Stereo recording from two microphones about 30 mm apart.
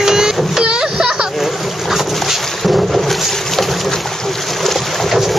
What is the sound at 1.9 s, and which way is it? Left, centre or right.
Boat, centre.